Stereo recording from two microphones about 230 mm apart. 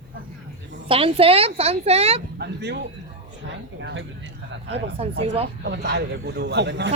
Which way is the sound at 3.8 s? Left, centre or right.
Right.